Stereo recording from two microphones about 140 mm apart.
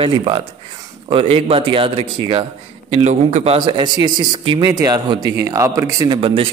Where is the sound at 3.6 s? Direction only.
30° right (ahead or behind).